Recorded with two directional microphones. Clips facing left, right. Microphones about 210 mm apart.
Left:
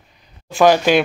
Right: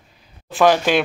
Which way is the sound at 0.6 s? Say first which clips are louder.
Left 3 dB; centre (ahead or behind).